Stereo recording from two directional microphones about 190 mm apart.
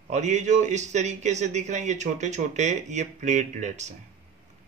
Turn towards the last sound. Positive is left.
turn(degrees=-40)  # may be behind; listen again after turning